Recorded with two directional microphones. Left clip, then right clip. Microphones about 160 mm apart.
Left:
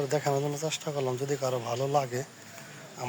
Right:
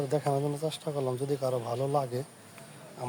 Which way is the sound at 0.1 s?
20° right (ahead or behind).